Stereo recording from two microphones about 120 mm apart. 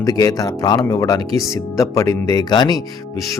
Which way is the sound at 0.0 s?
30° left (ahead or behind).